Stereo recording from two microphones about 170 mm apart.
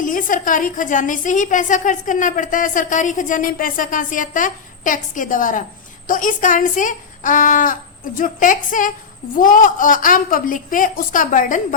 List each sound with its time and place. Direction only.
0.0 s a woman's voice: 50° left (ahead or behind)